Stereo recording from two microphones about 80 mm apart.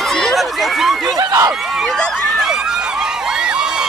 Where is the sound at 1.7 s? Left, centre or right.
Centre.